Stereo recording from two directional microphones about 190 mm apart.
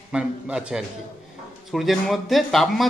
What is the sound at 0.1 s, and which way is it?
Speech, 5° right (ahead or behind).